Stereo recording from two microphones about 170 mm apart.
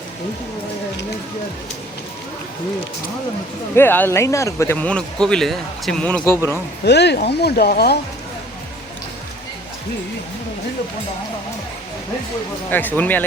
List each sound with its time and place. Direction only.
3.8 s speech: 10° left (ahead or behind)
6.8 s speech: 80° left
12.7 s speech: 10° left (ahead or behind)